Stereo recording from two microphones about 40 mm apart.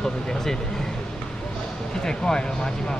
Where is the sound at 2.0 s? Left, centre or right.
Centre.